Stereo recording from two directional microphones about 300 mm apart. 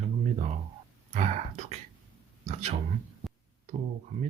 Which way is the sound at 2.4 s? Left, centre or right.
Right.